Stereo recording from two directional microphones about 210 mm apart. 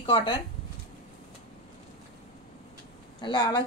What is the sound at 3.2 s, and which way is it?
Speech, 20° left (ahead or behind).